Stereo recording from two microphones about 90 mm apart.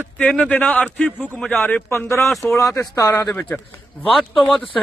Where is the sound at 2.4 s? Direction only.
15° left (ahead or behind).